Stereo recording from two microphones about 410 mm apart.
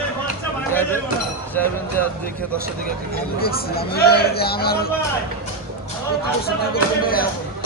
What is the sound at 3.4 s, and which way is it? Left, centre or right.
Speech, left.